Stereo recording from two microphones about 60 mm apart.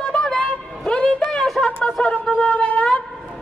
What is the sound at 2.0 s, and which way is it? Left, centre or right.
Wind instrument, centre.